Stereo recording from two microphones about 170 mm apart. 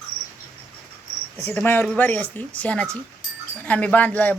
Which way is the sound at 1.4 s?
10° left (ahead or behind).